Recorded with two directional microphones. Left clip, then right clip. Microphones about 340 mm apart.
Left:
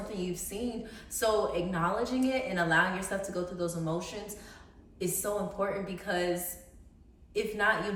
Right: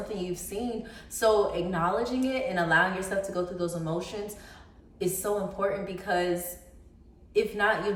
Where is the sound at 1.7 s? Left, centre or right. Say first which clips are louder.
Right 3 dB; centre.